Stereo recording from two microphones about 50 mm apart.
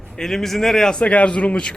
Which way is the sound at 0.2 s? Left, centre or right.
Centre.